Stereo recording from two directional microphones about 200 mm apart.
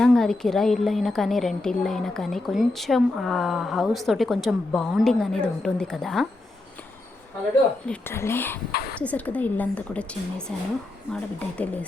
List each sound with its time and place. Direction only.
0.0 s a woman's voice: 5° left (ahead or behind)
7.9 s a woman's voice: 10° left (ahead or behind)
8.7 s speech: 50° left (ahead or behind)
9.0 s a woman's voice: 5° left (ahead or behind)